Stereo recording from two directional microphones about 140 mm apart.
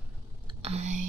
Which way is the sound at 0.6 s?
50° right (ahead or behind).